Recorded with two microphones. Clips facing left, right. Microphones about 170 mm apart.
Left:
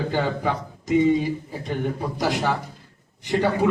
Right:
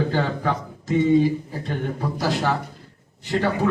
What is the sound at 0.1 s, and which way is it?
Speech, 15° left (ahead or behind).